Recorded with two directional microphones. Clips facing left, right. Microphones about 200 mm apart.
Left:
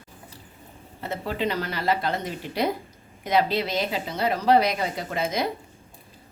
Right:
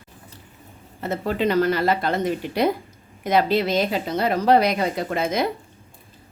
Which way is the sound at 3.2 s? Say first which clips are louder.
Right 4 dB; 50° right (ahead or behind).